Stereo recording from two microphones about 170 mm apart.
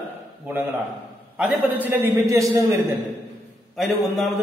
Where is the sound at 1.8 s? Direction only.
15° right (ahead or behind).